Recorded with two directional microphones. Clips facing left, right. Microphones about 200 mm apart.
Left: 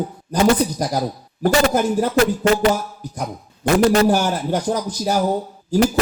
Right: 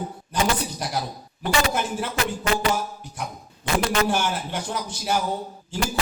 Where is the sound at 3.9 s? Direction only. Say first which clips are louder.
Left 7 dB; 40° left (ahead or behind).